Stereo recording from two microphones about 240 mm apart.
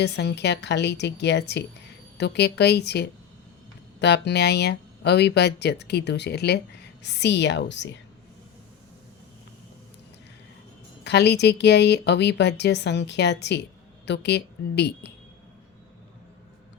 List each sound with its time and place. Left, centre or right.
0.0 s speech: left
11.0 s speech: left